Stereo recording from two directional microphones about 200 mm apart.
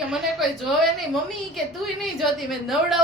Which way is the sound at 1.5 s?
Centre (ahead or behind).